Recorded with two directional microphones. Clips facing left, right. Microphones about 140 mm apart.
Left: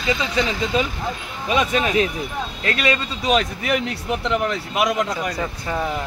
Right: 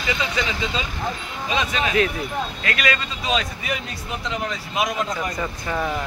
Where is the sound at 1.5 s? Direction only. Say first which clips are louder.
Left 4 dB; 50° left (ahead or behind).